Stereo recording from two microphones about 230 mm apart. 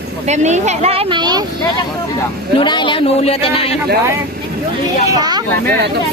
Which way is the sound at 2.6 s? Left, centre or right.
Left.